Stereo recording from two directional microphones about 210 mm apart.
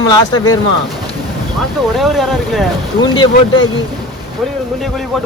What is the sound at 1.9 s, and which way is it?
Speech, centre (ahead or behind).